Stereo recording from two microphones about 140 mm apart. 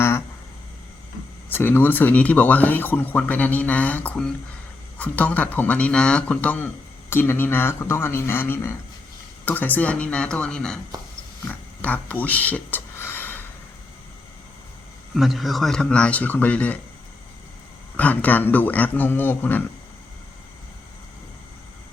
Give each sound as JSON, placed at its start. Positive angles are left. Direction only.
{"t": 1.5, "sound": "speech", "side_deg": 15}
{"t": 11.4, "sound": "a sound", "side_deg": 10}
{"t": 15.1, "sound": "speech", "side_deg": 0}
{"t": 17.9, "sound": "speech", "side_deg": 10}